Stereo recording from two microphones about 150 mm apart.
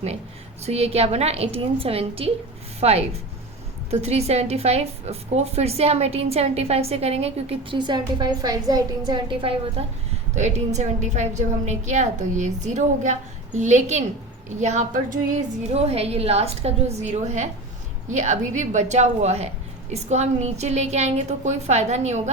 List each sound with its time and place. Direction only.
0.6 s a woman's voice: 45° right (ahead or behind)
10.3 s a woman's voice: 50° right (ahead or behind)
15.7 s a woman's voice: 40° right (ahead or behind)